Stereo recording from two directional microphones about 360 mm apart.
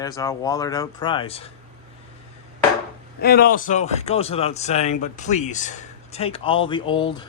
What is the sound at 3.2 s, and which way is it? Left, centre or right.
Speech, left.